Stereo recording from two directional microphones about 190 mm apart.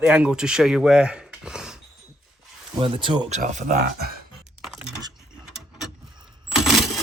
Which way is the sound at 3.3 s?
40° right (ahead or behind).